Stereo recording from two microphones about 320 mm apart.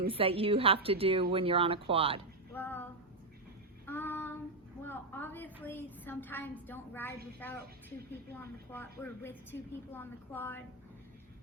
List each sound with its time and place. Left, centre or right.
0.1 s a woman's voice: centre
2.5 s child singing: centre
4.8 s a sound: centre
5.6 s a woman's voice: centre